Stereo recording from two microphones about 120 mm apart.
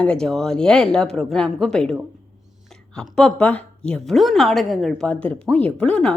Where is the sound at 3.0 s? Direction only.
5° left (ahead or behind).